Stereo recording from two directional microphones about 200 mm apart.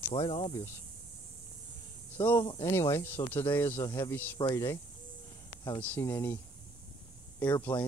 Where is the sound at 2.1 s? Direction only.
10° left (ahead or behind).